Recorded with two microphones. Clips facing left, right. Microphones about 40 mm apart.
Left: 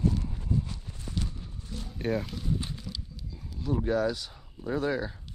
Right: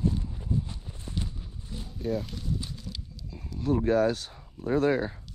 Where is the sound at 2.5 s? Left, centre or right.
Left.